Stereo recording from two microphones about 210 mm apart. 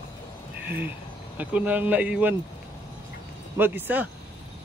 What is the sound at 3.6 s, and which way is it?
Speech, 10° right (ahead or behind).